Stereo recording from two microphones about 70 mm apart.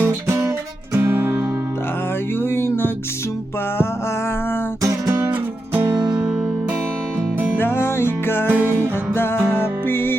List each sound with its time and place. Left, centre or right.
0.0 s music: right
2.4 s music: left
4.8 s music: right
5.2 s music: right
7.6 s music: left
8.4 s music: right
9.1 s music: left